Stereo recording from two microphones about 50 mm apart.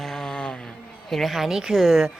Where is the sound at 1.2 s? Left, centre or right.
Centre.